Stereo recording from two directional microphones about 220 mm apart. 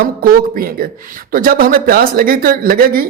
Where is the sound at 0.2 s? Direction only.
40° right (ahead or behind).